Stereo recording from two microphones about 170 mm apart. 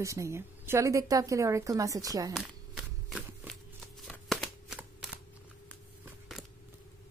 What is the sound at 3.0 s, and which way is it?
Shuffling cards, centre (ahead or behind).